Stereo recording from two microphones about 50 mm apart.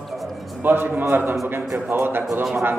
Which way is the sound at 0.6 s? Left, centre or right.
Right.